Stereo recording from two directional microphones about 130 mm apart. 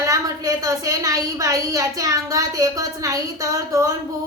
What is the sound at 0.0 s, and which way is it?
A woman's voice, 25° right (ahead or behind).